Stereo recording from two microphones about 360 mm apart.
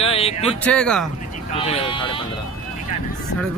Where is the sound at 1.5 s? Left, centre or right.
Centre.